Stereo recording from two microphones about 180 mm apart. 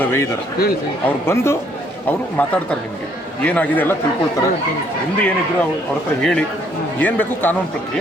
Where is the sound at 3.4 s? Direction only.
10° left (ahead or behind).